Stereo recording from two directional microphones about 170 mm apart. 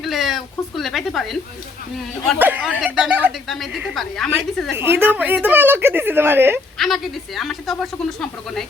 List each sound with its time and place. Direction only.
0.0 s speech: centre (ahead or behind)
2.4 s a woman's voice: 10° right (ahead or behind)
3.5 s speech: centre (ahead or behind)
4.7 s a woman's voice: 10° right (ahead or behind)
6.7 s speech: centre (ahead or behind)